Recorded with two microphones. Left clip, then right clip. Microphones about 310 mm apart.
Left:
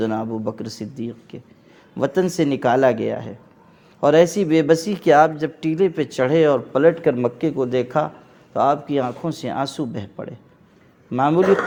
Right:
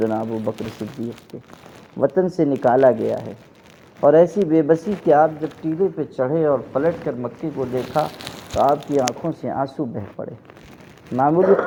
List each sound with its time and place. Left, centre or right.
0.0 s speech: left
2.0 s speech: left